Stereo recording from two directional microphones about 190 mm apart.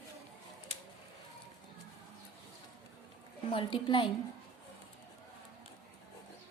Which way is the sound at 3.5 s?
25° left (ahead or behind).